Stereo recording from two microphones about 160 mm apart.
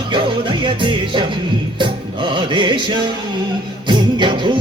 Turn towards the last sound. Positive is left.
turn(degrees=-30)  # may be behind; listen again after turning